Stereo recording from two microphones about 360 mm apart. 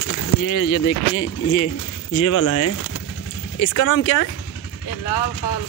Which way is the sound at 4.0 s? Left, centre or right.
Left.